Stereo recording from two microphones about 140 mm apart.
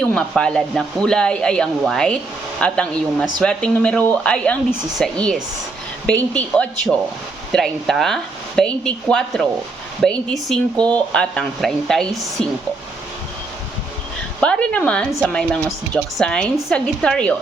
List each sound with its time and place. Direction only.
0.0 s speech: 5° left (ahead or behind)
14.4 s speech: 5° left (ahead or behind)